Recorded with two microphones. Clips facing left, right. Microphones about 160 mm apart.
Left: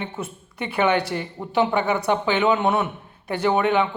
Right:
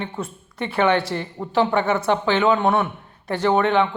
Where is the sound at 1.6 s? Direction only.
20° left (ahead or behind).